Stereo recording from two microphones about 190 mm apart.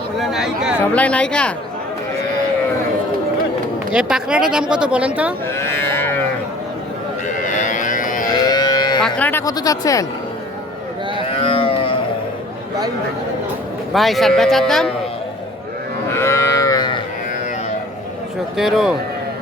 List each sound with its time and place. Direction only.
0.2 s a sound: centre (ahead or behind)
0.8 s speech: 5° left (ahead or behind)
3.9 s a woman's voice: 5° right (ahead or behind)
5.5 s livestock: 10° left (ahead or behind)
7.3 s livestock: 40° left (ahead or behind)
8.3 s livestock: 20° left (ahead or behind)
9.0 s speech: 5° left (ahead or behind)
11.3 s a sound: 30° left (ahead or behind)
13.9 s speech: centre (ahead or behind)
16.1 s livestock: 15° left (ahead or behind)
18.5 s speech: centre (ahead or behind)